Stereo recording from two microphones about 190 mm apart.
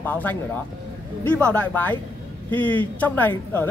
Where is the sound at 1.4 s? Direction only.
5° left (ahead or behind).